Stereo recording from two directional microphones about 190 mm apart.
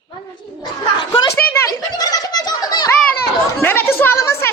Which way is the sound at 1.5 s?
20° left (ahead or behind).